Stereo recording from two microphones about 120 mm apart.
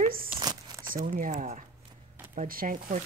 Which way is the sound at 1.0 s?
90° right.